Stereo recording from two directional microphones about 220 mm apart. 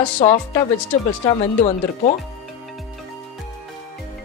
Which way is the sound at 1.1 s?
25° left (ahead or behind).